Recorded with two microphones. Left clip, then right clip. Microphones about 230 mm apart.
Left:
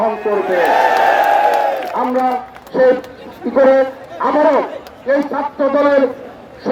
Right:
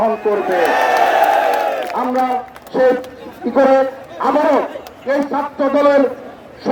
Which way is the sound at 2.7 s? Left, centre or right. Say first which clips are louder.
Left 2 dB; right.